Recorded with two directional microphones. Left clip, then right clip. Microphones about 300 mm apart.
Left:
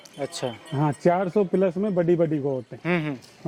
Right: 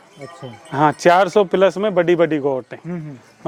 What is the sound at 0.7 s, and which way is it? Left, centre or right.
Speech, centre.